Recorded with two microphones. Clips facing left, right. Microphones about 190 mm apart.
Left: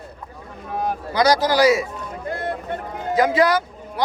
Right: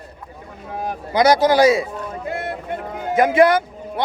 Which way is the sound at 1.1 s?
25° right (ahead or behind).